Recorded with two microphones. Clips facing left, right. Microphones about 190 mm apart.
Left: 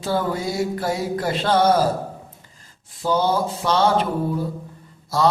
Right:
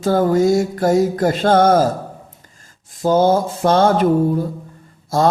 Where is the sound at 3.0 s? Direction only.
45° right (ahead or behind).